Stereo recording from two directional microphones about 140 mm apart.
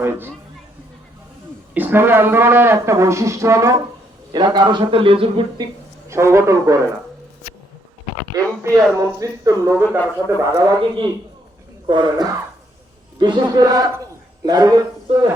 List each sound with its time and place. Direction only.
0.0 s speech: 15° right (ahead or behind)
1.7 s speech: 15° right (ahead or behind)
4.3 s a man's voice: 30° right (ahead or behind)
6.1 s speech: 20° right (ahead or behind)
8.3 s a man's voice: 25° right (ahead or behind)